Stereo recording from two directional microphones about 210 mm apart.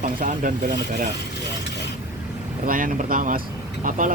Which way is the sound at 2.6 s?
40° right (ahead or behind).